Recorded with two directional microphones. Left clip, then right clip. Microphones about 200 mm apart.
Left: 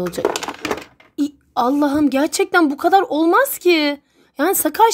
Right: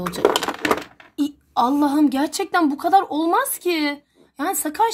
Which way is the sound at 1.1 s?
30° left (ahead or behind).